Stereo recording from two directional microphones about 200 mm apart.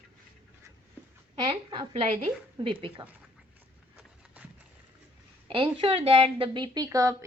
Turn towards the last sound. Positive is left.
turn(degrees=-15)  # may be behind; listen again after turning